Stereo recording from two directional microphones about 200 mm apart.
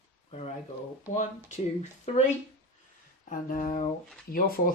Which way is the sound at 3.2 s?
40° left (ahead or behind).